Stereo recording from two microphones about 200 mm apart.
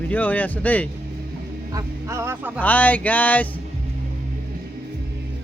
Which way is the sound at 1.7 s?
15° right (ahead or behind).